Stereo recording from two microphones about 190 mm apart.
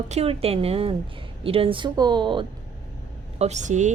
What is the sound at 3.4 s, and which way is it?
Speech, 35° right (ahead or behind).